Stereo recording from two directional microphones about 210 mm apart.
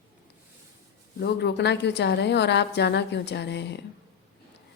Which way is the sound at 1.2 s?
50° left (ahead or behind).